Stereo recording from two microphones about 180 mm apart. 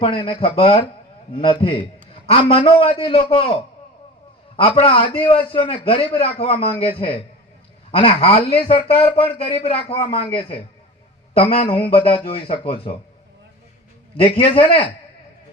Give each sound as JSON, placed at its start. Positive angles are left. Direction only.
{"t": 0.0, "sound": "a man's voice", "side_deg": 30}
{"t": 14.3, "sound": "a man's voice", "side_deg": 30}